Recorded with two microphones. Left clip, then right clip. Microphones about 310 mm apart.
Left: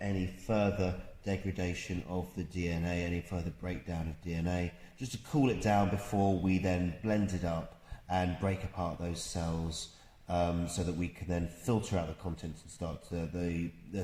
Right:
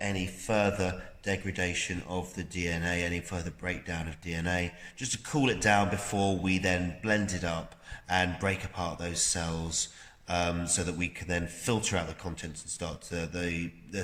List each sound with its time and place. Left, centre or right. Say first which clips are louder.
0.0 s a man's voice: right 5 dB; right